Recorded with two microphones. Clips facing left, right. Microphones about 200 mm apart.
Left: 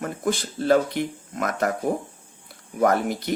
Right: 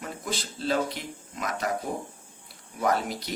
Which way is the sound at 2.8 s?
55° left (ahead or behind).